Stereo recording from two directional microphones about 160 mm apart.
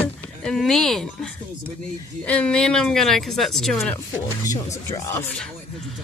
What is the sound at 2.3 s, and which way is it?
A woman's voice, 5° left (ahead or behind).